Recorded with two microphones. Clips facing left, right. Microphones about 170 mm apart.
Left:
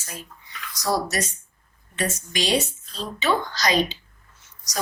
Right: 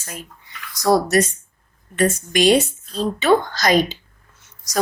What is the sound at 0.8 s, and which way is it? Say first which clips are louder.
A woman's voice: right 9 dB; 55° right (ahead or behind).